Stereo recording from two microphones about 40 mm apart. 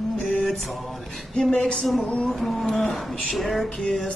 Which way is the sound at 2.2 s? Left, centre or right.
Centre.